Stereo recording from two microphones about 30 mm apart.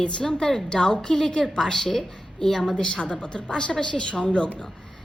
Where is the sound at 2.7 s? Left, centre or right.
Left.